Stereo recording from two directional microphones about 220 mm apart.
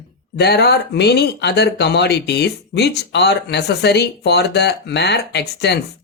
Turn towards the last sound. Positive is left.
turn(degrees=50)  # may be behind; listen again after turning